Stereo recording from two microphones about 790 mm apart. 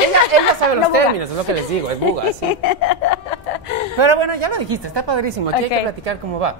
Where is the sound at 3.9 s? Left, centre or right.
Right.